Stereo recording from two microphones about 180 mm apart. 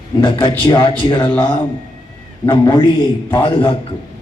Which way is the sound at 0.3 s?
30° left (ahead or behind).